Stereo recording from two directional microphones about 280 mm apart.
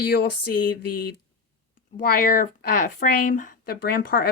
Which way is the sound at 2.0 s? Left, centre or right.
Left.